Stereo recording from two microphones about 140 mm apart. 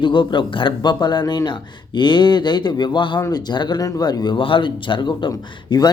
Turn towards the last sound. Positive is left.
turn(degrees=30)  # may be behind; listen again after turning